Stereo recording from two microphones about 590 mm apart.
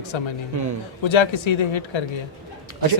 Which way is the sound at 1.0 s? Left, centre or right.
Left.